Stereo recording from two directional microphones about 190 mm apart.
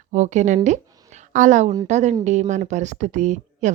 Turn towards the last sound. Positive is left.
turn(degrees=-40)  # may be behind; listen again after turning